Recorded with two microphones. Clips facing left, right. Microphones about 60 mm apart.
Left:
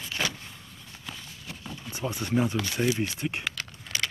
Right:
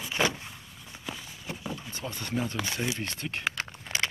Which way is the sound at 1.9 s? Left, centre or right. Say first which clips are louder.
Left 7 dB; centre.